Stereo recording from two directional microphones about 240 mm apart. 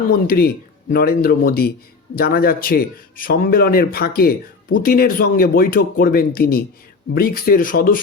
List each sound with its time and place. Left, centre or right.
0.3 s a man's voice: left